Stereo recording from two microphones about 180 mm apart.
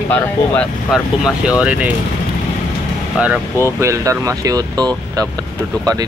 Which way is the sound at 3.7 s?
15° right (ahead or behind).